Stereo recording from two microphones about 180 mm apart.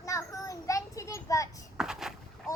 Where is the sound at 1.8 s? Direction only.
5° right (ahead or behind).